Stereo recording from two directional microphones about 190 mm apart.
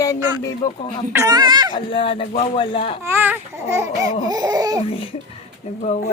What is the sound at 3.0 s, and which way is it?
Speech, 10° right (ahead or behind).